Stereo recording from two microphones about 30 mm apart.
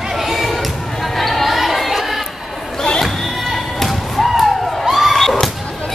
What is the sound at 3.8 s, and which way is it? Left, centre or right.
Slam, centre.